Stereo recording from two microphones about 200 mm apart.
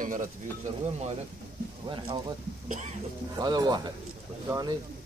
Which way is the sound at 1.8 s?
25° right (ahead or behind).